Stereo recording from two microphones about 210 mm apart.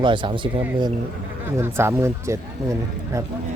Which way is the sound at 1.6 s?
10° right (ahead or behind).